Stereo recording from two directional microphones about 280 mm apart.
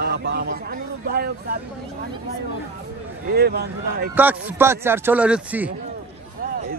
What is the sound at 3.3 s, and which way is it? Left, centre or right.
Speech, right.